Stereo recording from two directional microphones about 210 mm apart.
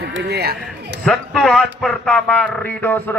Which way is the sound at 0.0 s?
50° right (ahead or behind).